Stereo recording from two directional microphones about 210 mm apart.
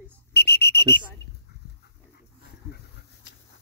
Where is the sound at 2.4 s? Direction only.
50° left (ahead or behind).